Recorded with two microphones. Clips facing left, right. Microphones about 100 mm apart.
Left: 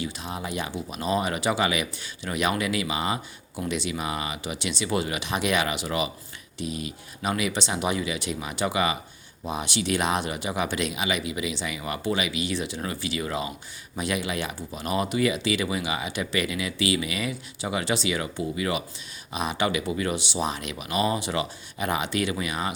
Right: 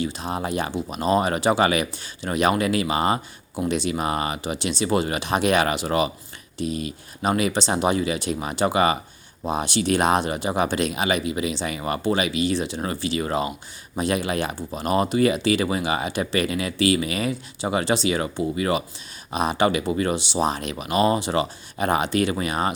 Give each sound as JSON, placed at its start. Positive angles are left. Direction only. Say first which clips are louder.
{"t": 0.0, "sound": "speech", "louder": "right 6 dB", "side_deg": -40}